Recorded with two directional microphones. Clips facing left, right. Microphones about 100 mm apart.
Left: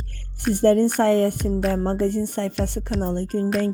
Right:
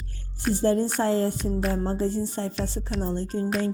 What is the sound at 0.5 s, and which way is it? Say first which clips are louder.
Speech: left 6 dB; 60° left (ahead or behind).